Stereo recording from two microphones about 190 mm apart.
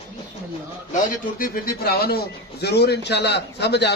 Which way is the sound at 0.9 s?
50° left (ahead or behind).